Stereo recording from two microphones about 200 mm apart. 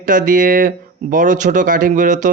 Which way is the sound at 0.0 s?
40° right (ahead or behind).